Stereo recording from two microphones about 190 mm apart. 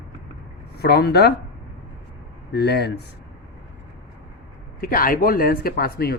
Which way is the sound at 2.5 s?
60° left (ahead or behind).